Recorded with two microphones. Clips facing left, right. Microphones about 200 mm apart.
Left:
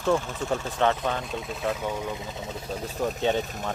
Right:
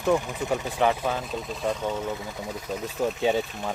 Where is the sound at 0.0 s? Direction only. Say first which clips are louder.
Right 1 dB; 15° right (ahead or behind).